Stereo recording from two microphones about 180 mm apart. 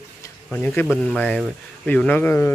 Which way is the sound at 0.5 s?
10° left (ahead or behind).